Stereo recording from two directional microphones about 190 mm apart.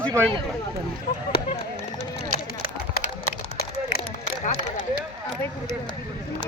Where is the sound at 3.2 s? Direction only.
55° left (ahead or behind).